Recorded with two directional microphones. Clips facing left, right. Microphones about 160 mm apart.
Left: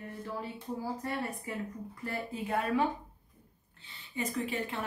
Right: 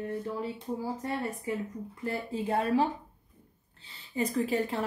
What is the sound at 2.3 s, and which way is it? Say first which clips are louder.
Speech: right 4 dB; 30° right (ahead or behind).